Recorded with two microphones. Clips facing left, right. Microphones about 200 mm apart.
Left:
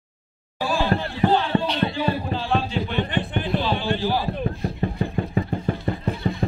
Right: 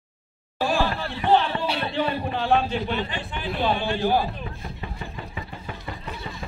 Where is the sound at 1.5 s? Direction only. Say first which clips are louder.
Left 6 dB; 40° left (ahead or behind).